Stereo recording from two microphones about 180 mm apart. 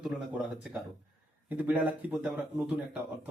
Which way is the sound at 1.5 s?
10° right (ahead or behind).